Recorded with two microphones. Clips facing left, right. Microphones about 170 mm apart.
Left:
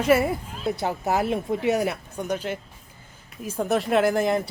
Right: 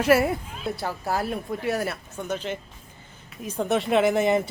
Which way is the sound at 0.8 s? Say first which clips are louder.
Left 3 dB; 20° left (ahead or behind).